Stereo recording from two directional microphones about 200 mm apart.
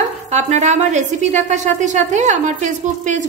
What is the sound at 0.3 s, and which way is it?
A woman's voice, 35° right (ahead or behind).